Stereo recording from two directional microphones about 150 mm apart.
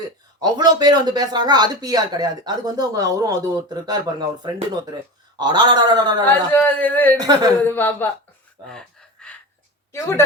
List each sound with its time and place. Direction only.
0.3 s speech: 30° right (ahead or behind)
5.4 s speech: 30° right (ahead or behind)
6.2 s a man's voice: 10° left (ahead or behind)
8.7 s gasp: 5° left (ahead or behind)
9.9 s a man's voice: 15° left (ahead or behind)